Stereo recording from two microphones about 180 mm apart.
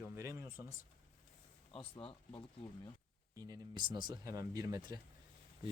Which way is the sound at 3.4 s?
20° right (ahead or behind).